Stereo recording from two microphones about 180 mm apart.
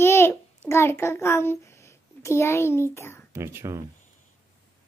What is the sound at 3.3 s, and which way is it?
Speech, 15° right (ahead or behind).